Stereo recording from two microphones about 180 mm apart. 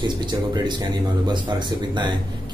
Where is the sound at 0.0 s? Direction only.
25° right (ahead or behind).